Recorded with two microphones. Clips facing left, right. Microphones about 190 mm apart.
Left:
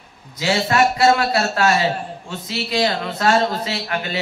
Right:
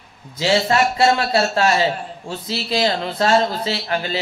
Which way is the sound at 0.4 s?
30° right (ahead or behind).